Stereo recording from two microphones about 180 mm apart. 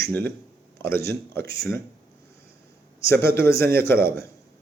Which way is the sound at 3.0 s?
15° left (ahead or behind).